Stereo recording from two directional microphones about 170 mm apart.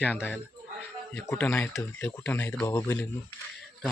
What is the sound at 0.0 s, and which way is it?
Speech, 10° left (ahead or behind).